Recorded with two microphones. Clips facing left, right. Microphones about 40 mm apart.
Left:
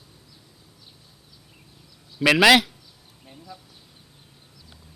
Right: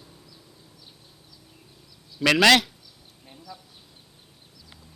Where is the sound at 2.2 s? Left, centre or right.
Centre.